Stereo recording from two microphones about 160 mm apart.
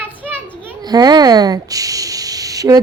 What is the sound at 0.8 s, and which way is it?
Speech, 25° right (ahead or behind).